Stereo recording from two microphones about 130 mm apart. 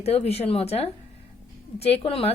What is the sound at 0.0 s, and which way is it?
Speech, 50° left (ahead or behind).